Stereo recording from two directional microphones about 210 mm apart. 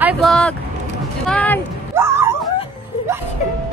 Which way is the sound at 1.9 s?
10° right (ahead or behind).